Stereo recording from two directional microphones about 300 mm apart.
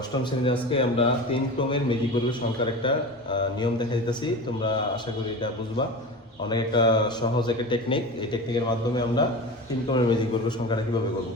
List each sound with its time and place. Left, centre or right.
0.1 s a man's voice: centre
2.8 s a man's voice: centre
6.5 s a man's voice: centre